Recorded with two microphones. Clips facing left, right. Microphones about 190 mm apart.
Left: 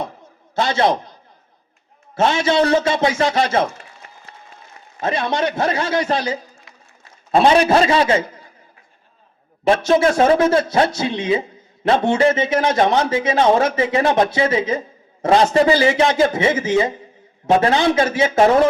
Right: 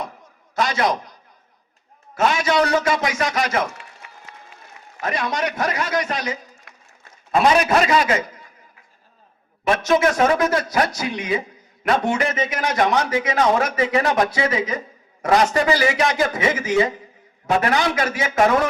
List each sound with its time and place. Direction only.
0.0 s a sound: 25° left (ahead or behind)
2.1 s speech: 25° left (ahead or behind)
4.0 s run: 40° left (ahead or behind)
4.9 s a man's voice: 25° left (ahead or behind)
9.6 s speech: 30° left (ahead or behind)